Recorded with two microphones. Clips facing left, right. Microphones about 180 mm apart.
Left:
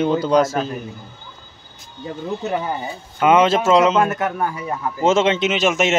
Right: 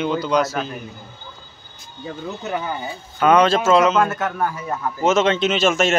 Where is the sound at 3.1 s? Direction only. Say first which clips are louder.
Left 1 dB; 20° left (ahead or behind).